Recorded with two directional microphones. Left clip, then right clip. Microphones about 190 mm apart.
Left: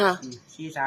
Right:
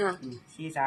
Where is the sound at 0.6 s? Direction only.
Centre (ahead or behind).